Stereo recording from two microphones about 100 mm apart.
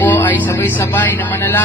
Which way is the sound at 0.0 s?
20° left (ahead or behind).